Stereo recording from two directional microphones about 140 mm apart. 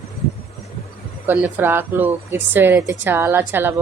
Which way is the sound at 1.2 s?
15° right (ahead or behind).